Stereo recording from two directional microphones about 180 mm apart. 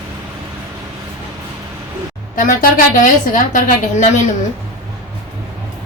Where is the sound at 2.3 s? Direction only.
50° left (ahead or behind).